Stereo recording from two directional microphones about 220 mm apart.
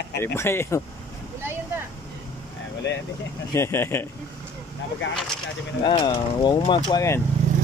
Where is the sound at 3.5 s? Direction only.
10° left (ahead or behind).